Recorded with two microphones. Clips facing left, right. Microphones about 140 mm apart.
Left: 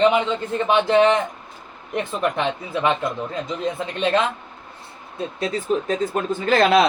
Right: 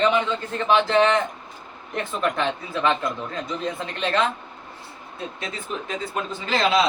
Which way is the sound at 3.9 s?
20° left (ahead or behind).